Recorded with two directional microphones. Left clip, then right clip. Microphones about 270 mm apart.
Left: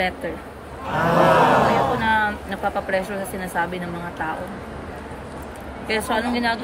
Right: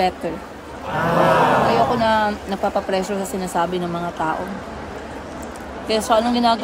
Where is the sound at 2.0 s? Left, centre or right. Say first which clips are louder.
Right 2 dB; centre.